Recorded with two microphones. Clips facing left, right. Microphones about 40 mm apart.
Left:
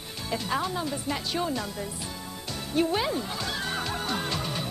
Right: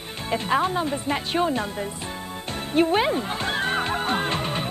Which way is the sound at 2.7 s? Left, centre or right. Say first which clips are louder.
Right 6 dB; right.